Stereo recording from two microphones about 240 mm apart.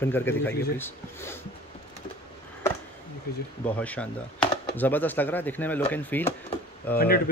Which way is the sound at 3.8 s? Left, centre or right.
Centre.